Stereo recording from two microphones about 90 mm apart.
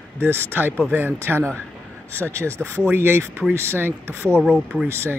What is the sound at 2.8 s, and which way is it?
Speech, 25° right (ahead or behind).